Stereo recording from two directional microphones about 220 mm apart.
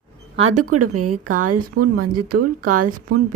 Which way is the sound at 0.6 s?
90° right.